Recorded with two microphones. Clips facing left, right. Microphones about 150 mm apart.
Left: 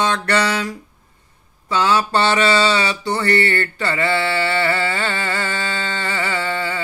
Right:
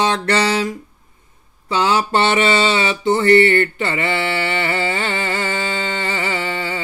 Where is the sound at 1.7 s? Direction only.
25° right (ahead or behind).